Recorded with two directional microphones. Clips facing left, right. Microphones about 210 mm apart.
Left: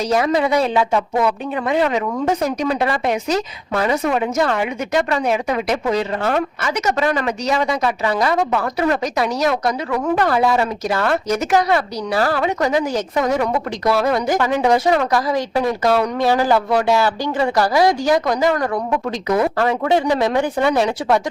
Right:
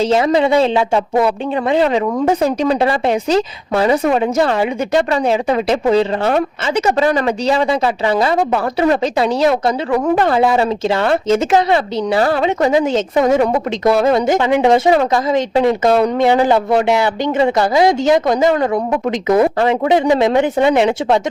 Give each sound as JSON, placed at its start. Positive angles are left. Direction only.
{"t": 0.0, "sound": "a woman's voice", "side_deg": -25}